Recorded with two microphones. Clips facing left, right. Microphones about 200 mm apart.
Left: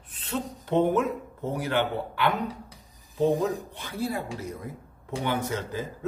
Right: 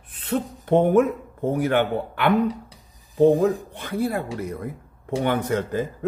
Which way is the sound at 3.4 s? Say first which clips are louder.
Right 7 dB; 55° right (ahead or behind).